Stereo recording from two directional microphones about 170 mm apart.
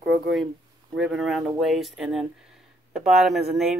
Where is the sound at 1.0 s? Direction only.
Centre (ahead or behind).